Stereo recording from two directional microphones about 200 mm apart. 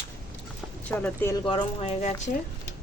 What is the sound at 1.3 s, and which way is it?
Speech, 25° left (ahead or behind).